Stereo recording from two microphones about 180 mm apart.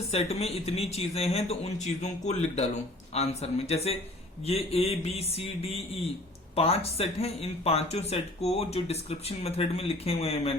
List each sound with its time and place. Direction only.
0.1 s speech: 35° left (ahead or behind)